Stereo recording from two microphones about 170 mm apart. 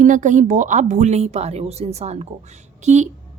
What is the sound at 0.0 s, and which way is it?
Speech, 45° right (ahead or behind).